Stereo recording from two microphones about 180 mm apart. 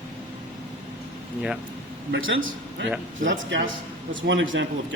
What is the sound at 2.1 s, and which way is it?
Speech, 90° right.